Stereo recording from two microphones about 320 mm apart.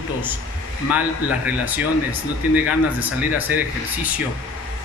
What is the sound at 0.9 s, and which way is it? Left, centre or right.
Speech, centre.